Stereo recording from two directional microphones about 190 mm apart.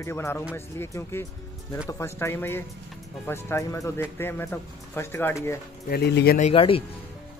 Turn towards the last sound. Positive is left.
turn(degrees=30)  # may be behind; listen again after turning